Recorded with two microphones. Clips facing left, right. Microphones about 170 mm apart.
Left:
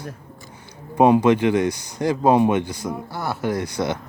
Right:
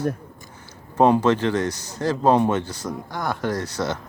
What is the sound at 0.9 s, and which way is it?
A man's voice, 10° left (ahead or behind).